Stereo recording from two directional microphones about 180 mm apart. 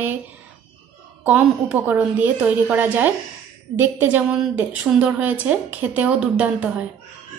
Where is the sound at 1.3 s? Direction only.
10° right (ahead or behind).